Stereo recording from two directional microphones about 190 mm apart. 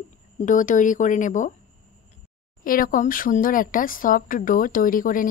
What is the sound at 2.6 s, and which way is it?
Speech, 45° left (ahead or behind).